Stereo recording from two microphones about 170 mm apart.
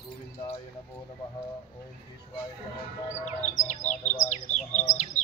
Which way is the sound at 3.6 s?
45° left (ahead or behind).